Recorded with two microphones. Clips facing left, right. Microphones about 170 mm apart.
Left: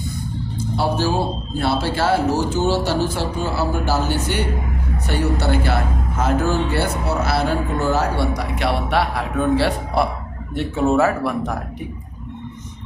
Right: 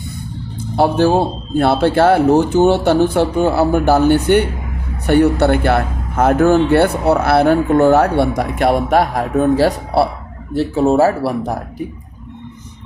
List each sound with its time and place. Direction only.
0.8 s speech: 55° right (ahead or behind); by 11.6 s 35° right (ahead or behind)